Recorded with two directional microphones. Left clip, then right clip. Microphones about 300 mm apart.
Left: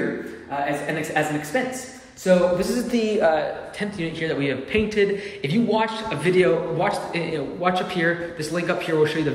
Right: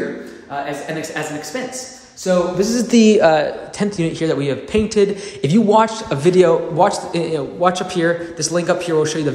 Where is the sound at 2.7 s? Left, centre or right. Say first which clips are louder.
Right 9 dB; right.